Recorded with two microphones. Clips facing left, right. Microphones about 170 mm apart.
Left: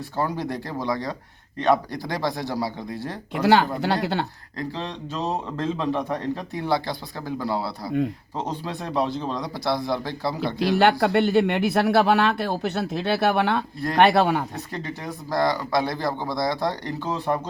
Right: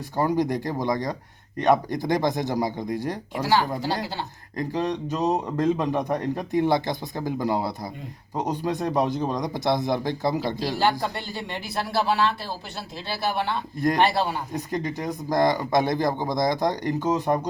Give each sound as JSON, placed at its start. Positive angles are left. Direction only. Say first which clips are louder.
{"t": 0.2, "sound": "a man's voice", "louder": "right 4 dB", "side_deg": -15}
{"t": 3.3, "sound": "speech", "louder": "left 5 dB", "side_deg": 65}
{"t": 4.5, "sound": "a man's voice", "louder": "right 5 dB", "side_deg": -15}
{"t": 10.6, "sound": "speech", "louder": "left 8 dB", "side_deg": 65}
{"t": 14.5, "sound": "a man's voice", "louder": "right 4 dB", "side_deg": -15}